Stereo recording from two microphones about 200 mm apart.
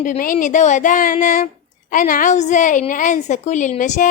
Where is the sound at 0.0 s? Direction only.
40° left (ahead or behind).